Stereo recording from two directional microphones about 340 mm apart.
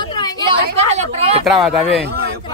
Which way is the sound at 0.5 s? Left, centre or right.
Centre.